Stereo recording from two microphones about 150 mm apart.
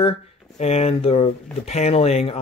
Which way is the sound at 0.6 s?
45° left (ahead or behind).